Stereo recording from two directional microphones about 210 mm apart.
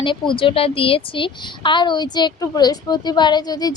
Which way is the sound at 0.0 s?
25° left (ahead or behind).